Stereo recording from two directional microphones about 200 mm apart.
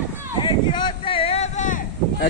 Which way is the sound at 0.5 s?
25° left (ahead or behind).